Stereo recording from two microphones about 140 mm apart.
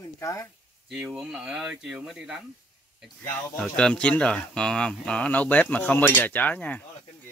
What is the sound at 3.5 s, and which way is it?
Speech, 5° left (ahead or behind).